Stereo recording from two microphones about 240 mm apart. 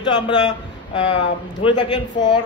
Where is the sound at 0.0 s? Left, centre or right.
Centre.